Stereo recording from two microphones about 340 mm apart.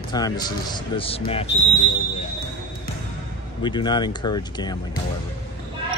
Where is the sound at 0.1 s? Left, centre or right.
Centre.